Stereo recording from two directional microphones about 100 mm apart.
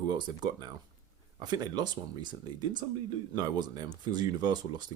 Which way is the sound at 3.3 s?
45° right (ahead or behind).